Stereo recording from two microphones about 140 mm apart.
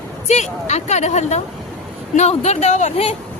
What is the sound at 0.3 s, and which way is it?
Speech, 55° left (ahead or behind).